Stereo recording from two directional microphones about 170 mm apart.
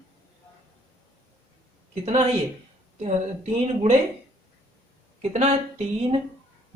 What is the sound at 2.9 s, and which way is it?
Speech, 45° right (ahead or behind).